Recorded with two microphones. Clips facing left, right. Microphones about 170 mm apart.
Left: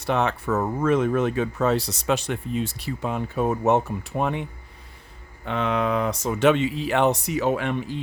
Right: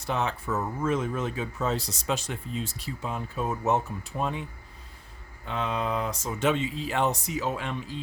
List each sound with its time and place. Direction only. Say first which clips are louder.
0.0 s speech: left 6 dB; 65° left (ahead or behind)
5.5 s speech: left 6 dB; 70° left (ahead or behind)